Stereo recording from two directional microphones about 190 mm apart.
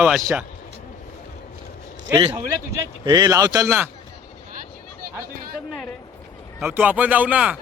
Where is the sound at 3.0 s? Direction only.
20° right (ahead or behind).